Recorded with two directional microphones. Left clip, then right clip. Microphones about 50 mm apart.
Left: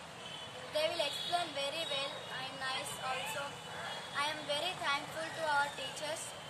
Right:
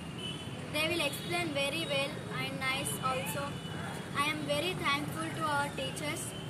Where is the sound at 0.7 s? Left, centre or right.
Left.